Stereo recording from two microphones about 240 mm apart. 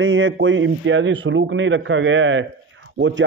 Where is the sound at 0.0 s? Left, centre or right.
Right.